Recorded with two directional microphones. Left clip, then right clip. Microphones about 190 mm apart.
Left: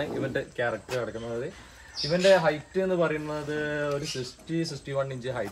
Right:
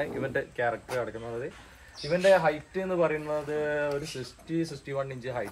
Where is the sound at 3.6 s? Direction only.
10° right (ahead or behind).